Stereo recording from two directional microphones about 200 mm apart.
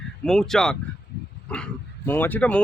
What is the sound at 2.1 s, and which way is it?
Speech, 10° left (ahead or behind).